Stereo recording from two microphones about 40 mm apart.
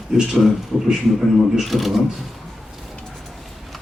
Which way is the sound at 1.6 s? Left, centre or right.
Centre.